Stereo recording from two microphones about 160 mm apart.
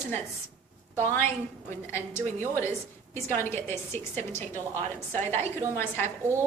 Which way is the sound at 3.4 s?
15° left (ahead or behind).